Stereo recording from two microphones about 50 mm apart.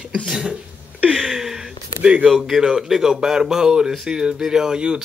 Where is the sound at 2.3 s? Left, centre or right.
Centre.